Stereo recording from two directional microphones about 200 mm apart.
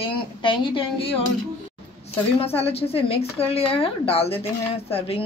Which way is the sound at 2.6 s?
30° left (ahead or behind).